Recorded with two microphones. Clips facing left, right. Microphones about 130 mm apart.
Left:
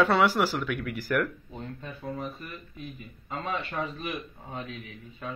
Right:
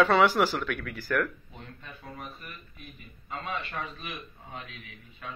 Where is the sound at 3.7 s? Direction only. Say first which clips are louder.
Left 5 dB; 40° left (ahead or behind).